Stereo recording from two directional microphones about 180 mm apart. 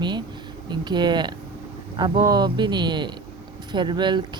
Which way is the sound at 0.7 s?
25° right (ahead or behind).